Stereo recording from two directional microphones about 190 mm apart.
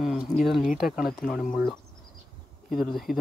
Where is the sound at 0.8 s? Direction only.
Centre (ahead or behind).